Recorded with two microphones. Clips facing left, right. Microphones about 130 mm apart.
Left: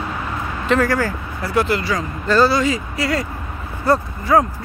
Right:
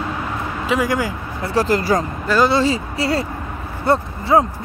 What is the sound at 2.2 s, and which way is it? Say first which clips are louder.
Speech: left 3 dB; 10° right (ahead or behind).